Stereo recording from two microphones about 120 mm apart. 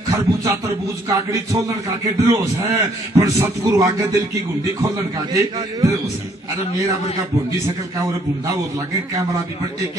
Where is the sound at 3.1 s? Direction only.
30° right (ahead or behind).